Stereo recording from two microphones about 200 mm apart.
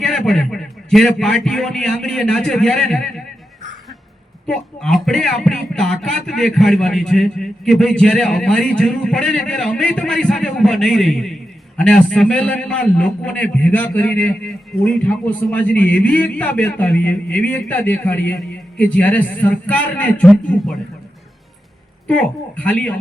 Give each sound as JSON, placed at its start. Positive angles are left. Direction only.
{"t": 0.0, "sound": "speech", "side_deg": 5}
{"t": 4.4, "sound": "a man's voice", "side_deg": 5}
{"t": 22.0, "sound": "speech", "side_deg": 5}